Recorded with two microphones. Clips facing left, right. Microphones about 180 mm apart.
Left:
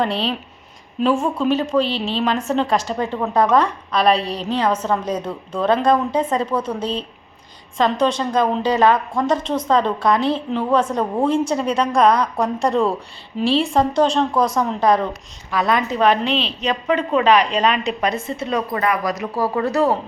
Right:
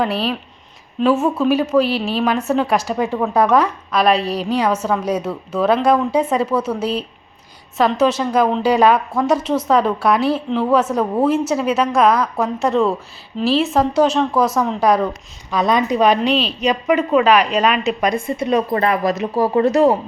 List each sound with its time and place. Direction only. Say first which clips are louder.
0.0 s a woman's voice: right 1 dB; 5° right (ahead or behind)
15.4 s a woman's voice: right 3 dB; 20° right (ahead or behind)
18.7 s speech: right 3 dB; 30° right (ahead or behind)